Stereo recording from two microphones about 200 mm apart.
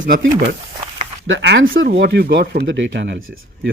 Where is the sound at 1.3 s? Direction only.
65° right (ahead or behind).